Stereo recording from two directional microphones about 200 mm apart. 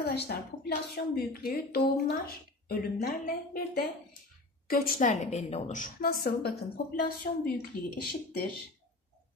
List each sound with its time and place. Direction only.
0.0 s speech: 55° left (ahead or behind)